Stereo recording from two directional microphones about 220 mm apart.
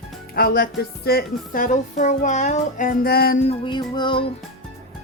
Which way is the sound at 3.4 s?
25° left (ahead or behind).